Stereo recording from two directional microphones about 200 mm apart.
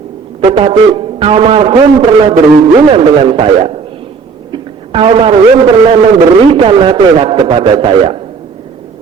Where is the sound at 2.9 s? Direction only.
25° right (ahead or behind).